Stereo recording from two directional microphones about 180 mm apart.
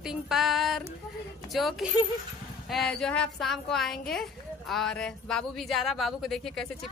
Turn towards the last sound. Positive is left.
turn(degrees=0)  # may be behind; listen again after turning